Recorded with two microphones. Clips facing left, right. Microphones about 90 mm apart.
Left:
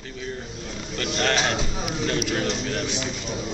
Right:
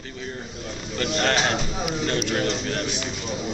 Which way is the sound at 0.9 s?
5° right (ahead or behind).